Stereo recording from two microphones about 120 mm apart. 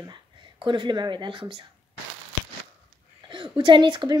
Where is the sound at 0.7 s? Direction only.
40° right (ahead or behind).